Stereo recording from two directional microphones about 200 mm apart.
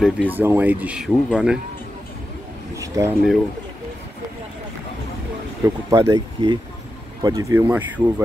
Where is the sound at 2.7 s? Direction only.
15° right (ahead or behind).